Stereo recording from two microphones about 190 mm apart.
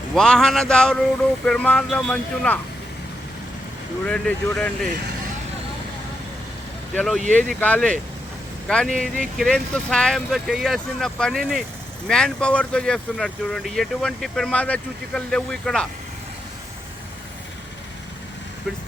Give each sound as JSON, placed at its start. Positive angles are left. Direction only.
{"t": 0.2, "sound": "speech", "side_deg": 0}
{"t": 4.0, "sound": "speech", "side_deg": 5}
{"t": 6.9, "sound": "speech", "side_deg": 0}